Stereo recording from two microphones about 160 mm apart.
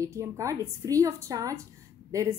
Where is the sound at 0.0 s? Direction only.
20° right (ahead or behind).